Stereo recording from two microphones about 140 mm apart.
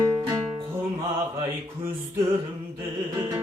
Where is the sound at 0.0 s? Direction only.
25° right (ahead or behind).